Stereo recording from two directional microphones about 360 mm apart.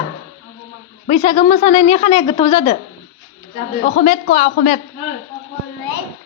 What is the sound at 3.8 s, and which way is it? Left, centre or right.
Speech, centre.